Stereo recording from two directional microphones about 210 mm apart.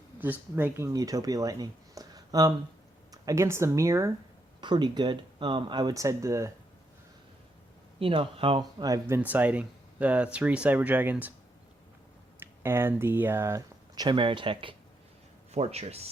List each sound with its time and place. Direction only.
0.2 s speech: 10° right (ahead or behind)
7.9 s speech: 25° right (ahead or behind); by 11.3 s 10° right (ahead or behind)
12.4 s speech: 10° right (ahead or behind); by 16.0 s 30° right (ahead or behind)